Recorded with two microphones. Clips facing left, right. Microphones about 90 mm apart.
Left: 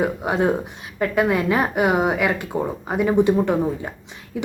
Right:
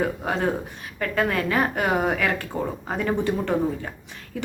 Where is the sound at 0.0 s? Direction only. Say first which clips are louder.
Left 4 dB; 15° left (ahead or behind).